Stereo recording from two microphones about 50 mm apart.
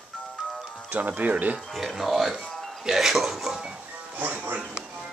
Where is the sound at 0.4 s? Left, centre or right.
Centre.